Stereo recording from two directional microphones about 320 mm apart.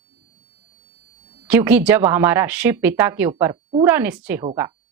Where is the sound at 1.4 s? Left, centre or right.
Centre.